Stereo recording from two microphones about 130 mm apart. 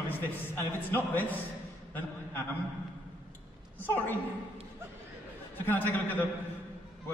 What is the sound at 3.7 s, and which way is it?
Speech, 15° left (ahead or behind).